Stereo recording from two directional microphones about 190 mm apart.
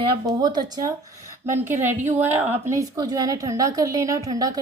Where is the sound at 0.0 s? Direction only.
20° right (ahead or behind).